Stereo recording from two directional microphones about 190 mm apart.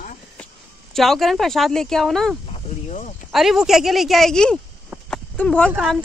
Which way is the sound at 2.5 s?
40° left (ahead or behind).